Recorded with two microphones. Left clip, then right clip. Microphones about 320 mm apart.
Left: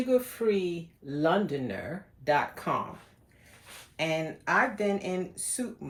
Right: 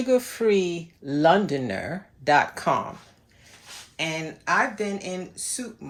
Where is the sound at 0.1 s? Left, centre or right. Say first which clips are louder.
Right 6 dB; right.